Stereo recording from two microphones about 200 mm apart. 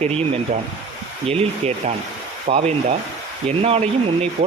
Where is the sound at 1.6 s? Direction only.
35° right (ahead or behind).